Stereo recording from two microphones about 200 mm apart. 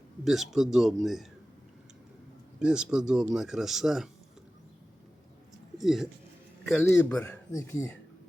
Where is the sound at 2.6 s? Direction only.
5° right (ahead or behind).